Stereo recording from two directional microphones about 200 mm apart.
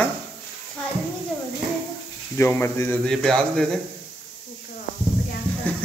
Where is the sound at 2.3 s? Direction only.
10° left (ahead or behind).